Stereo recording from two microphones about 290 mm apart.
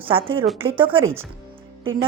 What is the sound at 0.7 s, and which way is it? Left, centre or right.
Speech, centre.